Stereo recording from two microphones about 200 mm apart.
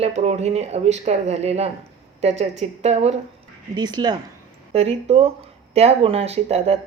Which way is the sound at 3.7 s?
20° right (ahead or behind).